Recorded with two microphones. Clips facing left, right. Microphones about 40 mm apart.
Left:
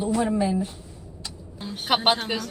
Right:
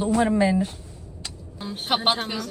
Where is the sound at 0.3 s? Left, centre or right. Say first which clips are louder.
Right 3 dB; right.